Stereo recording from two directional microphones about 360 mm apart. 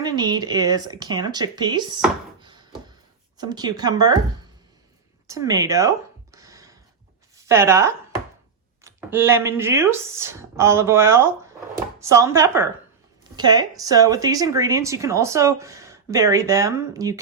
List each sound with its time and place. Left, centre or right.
0.0 s speech: centre
5.3 s speech: centre
6.3 s a sound: centre
7.3 s speech: centre